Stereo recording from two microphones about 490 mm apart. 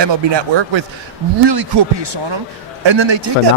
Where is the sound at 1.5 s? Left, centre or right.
Right.